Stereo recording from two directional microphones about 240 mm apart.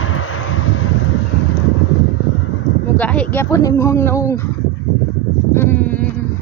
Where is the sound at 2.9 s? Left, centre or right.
Centre.